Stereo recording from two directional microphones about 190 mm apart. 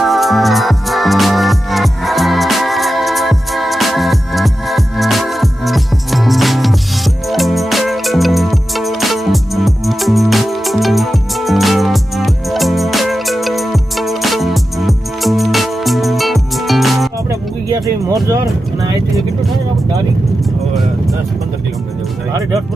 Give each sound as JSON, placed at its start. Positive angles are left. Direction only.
{"t": 0.0, "sound": "music", "side_deg": 0}
{"t": 17.2, "sound": "music", "side_deg": -15}